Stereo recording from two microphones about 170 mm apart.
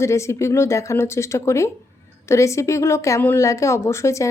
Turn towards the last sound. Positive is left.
turn(degrees=15)  # may be behind; listen again after turning